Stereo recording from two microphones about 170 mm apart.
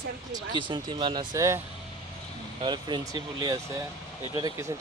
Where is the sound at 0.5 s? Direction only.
30° right (ahead or behind).